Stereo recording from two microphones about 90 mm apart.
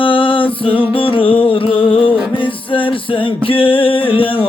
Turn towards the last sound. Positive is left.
turn(degrees=75)  # may be behind; listen again after turning